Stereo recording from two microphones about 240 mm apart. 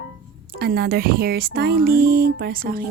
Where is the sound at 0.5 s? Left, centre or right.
Right.